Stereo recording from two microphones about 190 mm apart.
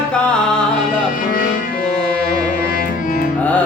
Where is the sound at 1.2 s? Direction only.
45° left (ahead or behind).